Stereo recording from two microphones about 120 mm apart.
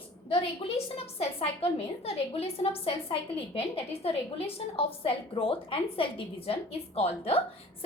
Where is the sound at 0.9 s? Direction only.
55° left (ahead or behind).